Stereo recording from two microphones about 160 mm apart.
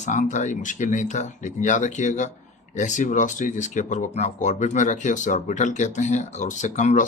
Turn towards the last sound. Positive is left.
turn(degrees=50)  # may be behind; listen again after turning